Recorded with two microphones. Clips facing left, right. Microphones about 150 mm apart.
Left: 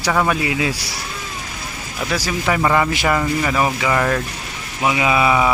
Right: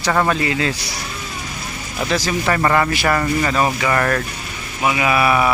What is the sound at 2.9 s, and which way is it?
Speech, 20° left (ahead or behind).